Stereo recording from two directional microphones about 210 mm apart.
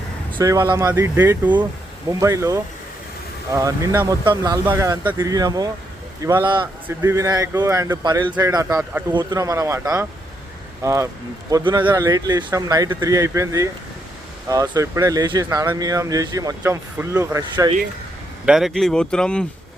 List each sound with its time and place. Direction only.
0.3 s speech: 15° right (ahead or behind)
18.4 s speech: centre (ahead or behind)